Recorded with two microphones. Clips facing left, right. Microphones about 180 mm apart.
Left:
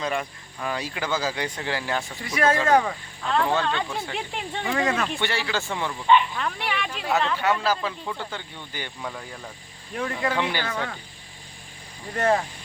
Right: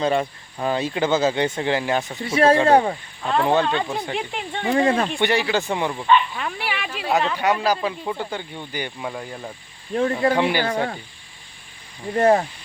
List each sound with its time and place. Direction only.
0.0 s speech: 30° right (ahead or behind)
3.2 s speech: 15° right (ahead or behind)
4.7 s speech: 30° right (ahead or behind)
5.2 s speech: 15° right (ahead or behind)
6.3 s speech: 5° right (ahead or behind)
9.9 s speech: 35° right (ahead or behind)
10.3 s speech: 15° right (ahead or behind)
10.7 s speech: 35° right (ahead or behind)
12.1 s speech: 30° right (ahead or behind)